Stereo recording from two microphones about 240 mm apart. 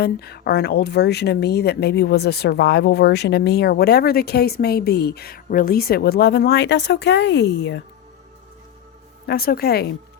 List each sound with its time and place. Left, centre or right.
0.0 s a woman's voice: left
9.2 s speech: left